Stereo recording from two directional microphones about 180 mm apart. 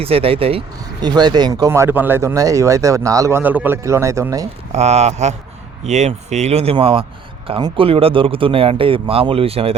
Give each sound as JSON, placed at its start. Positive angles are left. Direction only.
{"t": 0.0, "sound": "speech", "side_deg": -30}
{"t": 4.7, "sound": "speech", "side_deg": -35}